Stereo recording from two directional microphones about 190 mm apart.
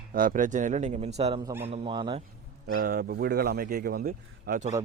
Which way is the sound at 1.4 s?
15° right (ahead or behind).